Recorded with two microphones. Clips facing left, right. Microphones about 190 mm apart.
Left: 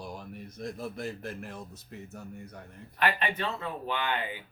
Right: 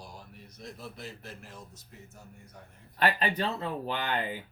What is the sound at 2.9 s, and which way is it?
Speech, 35° right (ahead or behind).